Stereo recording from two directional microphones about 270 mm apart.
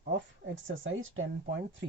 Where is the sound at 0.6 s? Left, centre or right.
Right.